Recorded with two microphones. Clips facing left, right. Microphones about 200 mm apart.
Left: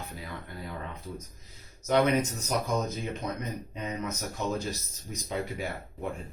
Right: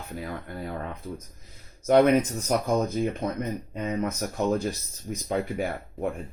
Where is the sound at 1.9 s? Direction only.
55° right (ahead or behind).